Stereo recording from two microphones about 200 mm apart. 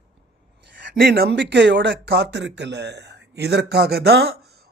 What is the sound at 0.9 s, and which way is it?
Speech, 50° right (ahead or behind).